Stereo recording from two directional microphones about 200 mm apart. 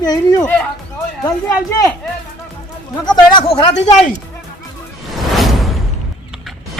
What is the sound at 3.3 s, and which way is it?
Speech, 25° left (ahead or behind).